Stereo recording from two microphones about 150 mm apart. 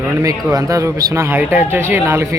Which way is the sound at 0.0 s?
20° right (ahead or behind).